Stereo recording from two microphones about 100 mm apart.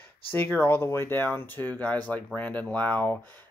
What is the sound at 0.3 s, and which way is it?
Speech, 20° left (ahead or behind).